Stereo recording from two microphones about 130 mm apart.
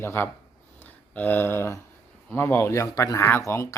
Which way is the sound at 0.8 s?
15° left (ahead or behind).